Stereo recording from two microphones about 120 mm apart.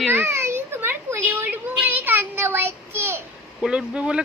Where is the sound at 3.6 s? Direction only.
10° right (ahead or behind).